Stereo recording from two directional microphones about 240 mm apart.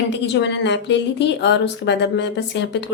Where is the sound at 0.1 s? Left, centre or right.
Left.